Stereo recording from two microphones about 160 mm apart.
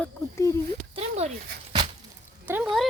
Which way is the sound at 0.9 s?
40° right (ahead or behind).